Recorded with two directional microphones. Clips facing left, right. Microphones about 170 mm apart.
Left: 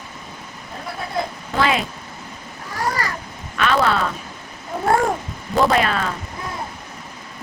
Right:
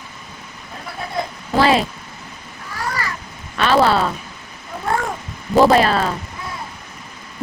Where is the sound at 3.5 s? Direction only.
30° right (ahead or behind).